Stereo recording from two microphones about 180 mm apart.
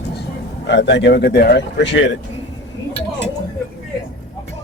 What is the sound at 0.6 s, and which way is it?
Speech, 75° left (ahead or behind).